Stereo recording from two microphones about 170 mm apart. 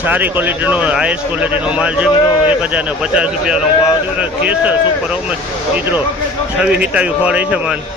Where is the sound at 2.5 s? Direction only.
5° right (ahead or behind).